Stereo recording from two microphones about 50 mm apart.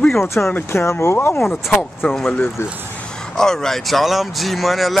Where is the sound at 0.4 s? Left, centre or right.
Left.